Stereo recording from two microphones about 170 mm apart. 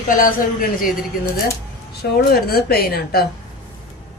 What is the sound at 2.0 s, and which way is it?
Speech, 65° left (ahead or behind).